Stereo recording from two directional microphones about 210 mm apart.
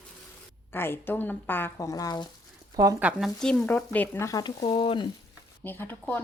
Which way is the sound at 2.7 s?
15° right (ahead or behind).